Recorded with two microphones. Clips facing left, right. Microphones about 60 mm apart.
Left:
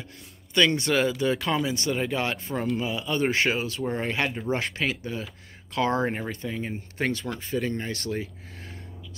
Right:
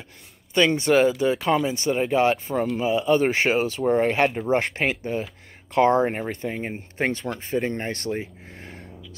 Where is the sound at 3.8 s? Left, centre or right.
Right.